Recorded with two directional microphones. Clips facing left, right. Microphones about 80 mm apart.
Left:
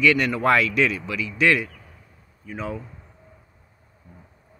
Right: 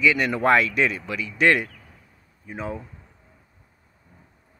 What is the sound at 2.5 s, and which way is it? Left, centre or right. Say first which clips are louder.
Speech: left 1 dB; right.